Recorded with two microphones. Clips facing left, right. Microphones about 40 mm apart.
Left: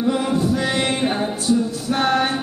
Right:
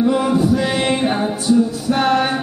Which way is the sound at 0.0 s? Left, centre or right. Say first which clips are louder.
Right 4 dB; centre.